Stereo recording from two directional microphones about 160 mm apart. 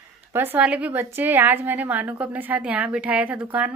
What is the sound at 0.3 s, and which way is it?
A woman's voice, 15° right (ahead or behind).